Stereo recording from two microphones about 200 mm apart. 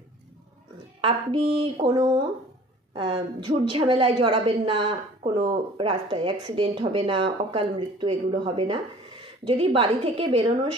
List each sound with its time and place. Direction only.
1.0 s a woman's voice: 25° right (ahead or behind)